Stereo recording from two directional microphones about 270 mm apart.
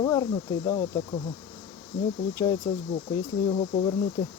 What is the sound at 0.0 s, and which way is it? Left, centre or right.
Speech, centre.